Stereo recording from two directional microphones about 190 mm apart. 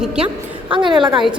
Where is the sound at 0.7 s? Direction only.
25° right (ahead or behind).